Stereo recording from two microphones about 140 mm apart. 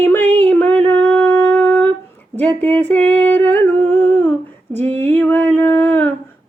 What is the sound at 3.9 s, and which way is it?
Humming, 15° left (ahead or behind).